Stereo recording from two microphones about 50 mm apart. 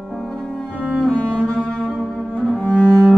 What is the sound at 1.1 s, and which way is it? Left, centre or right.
Cello, left.